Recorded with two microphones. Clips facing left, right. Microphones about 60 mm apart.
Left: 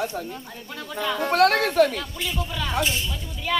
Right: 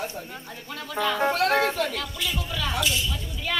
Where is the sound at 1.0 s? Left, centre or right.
Right.